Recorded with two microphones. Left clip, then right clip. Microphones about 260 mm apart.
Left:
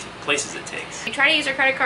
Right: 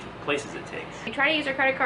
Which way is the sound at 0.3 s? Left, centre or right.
Centre.